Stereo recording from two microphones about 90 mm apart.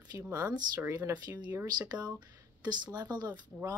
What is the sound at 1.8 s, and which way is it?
Speech, 45° right (ahead or behind).